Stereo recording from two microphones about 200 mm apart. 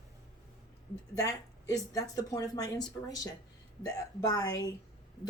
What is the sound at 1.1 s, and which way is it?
Speech, 15° left (ahead or behind).